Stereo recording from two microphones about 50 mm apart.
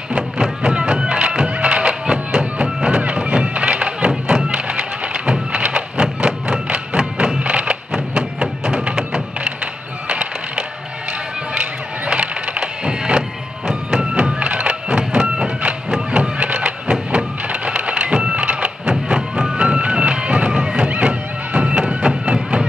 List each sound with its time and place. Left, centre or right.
0.1 s music: centre
12.1 s wood: centre
13.7 s music: centre
14.1 s a sound: right